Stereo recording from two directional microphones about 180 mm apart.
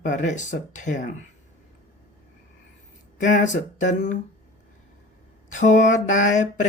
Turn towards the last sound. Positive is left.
turn(degrees=45)  # may be behind; listen again after turning